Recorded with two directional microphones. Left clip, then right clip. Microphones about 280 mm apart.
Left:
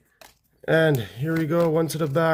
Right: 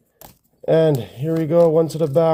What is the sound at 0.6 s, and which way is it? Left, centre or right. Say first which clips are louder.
Speech: right 4 dB; left.